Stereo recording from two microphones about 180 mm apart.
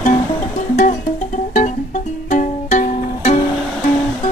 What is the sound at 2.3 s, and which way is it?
Music, 45° left (ahead or behind).